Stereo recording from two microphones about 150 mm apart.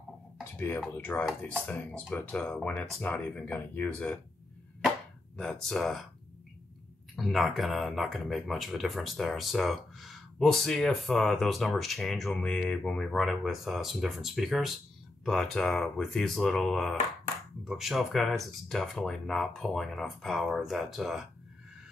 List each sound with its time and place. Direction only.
0.4 s a sound: 15° left (ahead or behind)
0.9 s speech: 10° left (ahead or behind)
5.4 s speech: 5° left (ahead or behind)
7.2 s speech: centre (ahead or behind)